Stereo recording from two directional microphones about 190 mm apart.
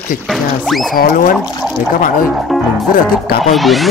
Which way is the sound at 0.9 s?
45° left (ahead or behind).